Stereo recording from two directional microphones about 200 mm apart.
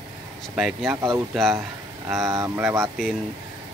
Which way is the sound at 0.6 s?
Centre (ahead or behind).